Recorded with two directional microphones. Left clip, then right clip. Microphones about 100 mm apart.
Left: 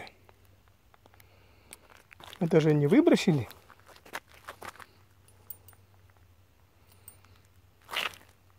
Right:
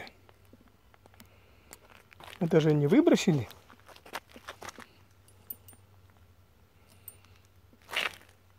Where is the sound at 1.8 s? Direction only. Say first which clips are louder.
Even; 10° left (ahead or behind).